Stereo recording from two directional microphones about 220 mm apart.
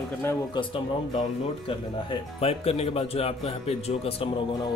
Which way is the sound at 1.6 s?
25° left (ahead or behind).